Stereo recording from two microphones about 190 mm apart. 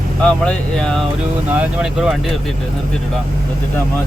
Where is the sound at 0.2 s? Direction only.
5° left (ahead or behind).